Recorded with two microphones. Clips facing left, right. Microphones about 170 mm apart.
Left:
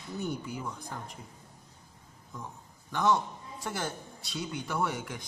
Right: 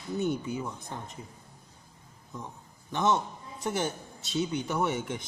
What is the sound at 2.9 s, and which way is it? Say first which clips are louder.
A man's voice: even; 20° right (ahead or behind).